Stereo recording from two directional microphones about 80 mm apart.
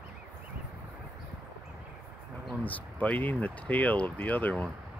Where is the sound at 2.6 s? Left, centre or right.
Left.